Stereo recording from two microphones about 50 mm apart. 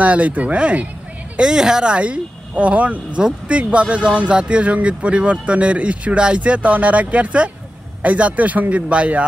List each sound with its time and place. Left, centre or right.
0.0 s speech: right
1.3 s speech: centre